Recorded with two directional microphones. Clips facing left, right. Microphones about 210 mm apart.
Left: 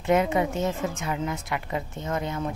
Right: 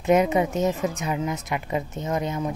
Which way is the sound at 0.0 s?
20° right (ahead or behind).